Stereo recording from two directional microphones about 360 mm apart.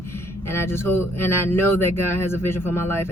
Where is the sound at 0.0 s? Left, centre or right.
Centre.